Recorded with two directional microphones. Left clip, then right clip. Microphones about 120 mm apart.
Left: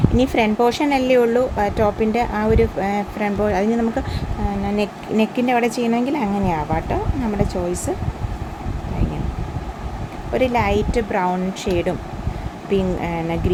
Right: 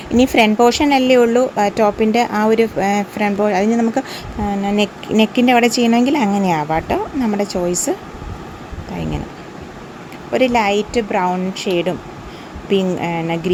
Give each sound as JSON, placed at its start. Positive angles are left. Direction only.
{"t": 0.1, "sound": "speech", "side_deg": -45}
{"t": 4.6, "sound": "speech", "side_deg": -45}
{"t": 10.3, "sound": "a woman's voice", "side_deg": -45}
{"t": 12.7, "sound": "a woman's voice", "side_deg": -40}